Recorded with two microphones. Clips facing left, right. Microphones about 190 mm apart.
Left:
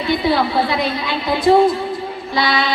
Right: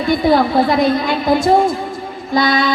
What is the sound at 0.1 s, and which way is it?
Speech, 45° right (ahead or behind).